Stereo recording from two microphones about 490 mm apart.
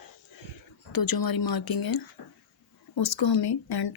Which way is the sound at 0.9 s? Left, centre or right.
Left.